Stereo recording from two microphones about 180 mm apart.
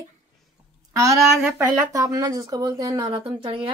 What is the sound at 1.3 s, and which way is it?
Speech, 5° right (ahead or behind).